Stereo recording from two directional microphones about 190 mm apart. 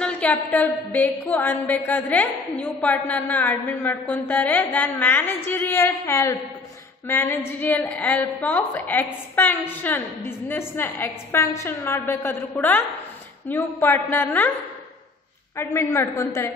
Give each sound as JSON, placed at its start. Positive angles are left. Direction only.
{"t": 0.0, "sound": "a woman's voice", "side_deg": 5}
{"t": 15.5, "sound": "a woman's voice", "side_deg": 15}